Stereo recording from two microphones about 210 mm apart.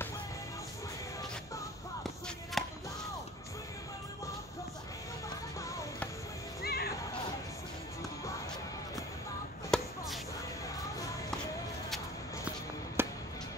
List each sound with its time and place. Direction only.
2.6 s a sound: centre (ahead or behind)
5.6 s music: 15° left (ahead or behind)
6.6 s music: 50° left (ahead or behind)
9.7 s chop: centre (ahead or behind)
13.0 s music: 10° right (ahead or behind)